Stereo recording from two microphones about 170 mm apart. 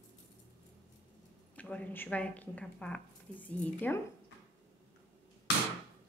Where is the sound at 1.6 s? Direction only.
10° left (ahead or behind).